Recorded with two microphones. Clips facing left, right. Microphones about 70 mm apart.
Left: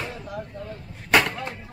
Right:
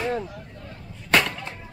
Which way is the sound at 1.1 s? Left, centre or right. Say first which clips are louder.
Left 1 dB; centre.